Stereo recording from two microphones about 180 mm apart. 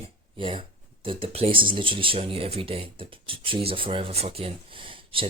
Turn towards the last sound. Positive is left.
turn(degrees=-30)  # may be behind; listen again after turning